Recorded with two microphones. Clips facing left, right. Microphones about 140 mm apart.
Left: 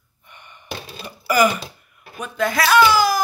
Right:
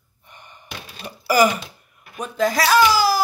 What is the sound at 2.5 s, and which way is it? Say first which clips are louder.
Speech: left 2 dB; 40° right (ahead or behind).